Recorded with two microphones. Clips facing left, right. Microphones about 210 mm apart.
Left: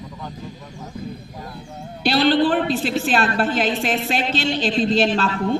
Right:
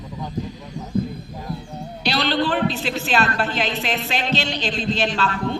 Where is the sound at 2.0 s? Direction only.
50° left (ahead or behind).